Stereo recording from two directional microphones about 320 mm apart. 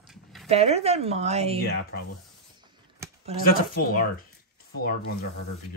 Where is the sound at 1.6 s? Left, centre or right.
Left.